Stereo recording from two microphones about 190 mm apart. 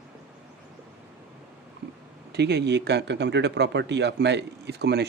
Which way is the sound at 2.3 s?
60° right (ahead or behind).